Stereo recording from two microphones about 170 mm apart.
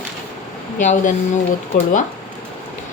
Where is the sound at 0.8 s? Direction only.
45° left (ahead or behind).